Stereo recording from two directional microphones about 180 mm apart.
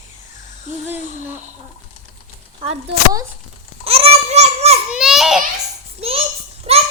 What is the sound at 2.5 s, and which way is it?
A child's voice, 35° right (ahead or behind).